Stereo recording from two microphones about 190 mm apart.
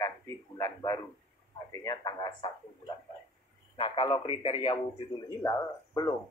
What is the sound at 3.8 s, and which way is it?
Speech, 25° left (ahead or behind).